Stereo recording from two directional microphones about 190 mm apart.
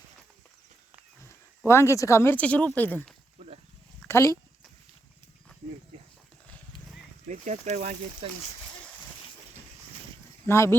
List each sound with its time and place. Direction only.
1.2 s speech: 15° left (ahead or behind)
7.3 s speech: 40° right (ahead or behind)
10.4 s speech: 15° left (ahead or behind)